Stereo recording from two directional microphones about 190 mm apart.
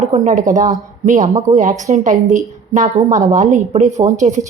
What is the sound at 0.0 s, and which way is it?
A woman's voice, 40° right (ahead or behind).